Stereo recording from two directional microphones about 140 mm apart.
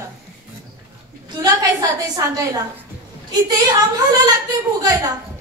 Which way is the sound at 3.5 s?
25° right (ahead or behind).